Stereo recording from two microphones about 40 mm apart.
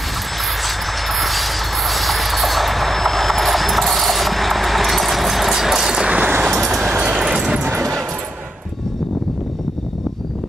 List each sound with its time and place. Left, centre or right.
0.6 s vehicle: centre
6.0 s vehicle: right
6.5 s vehicle: centre
7.0 s vehicle: right